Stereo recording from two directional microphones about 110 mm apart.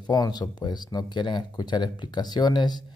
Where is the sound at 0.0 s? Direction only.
40° left (ahead or behind).